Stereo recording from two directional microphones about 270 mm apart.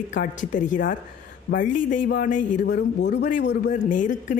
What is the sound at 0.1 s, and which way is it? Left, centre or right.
Speech, left.